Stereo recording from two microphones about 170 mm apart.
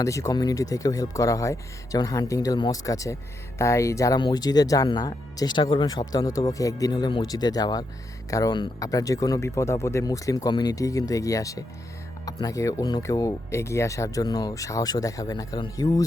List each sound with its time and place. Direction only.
0.0 s speech: 20° left (ahead or behind)